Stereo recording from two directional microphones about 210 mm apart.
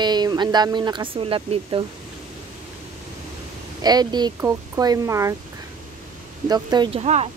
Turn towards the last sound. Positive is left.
turn(degrees=-30)  # may be behind; listen again after turning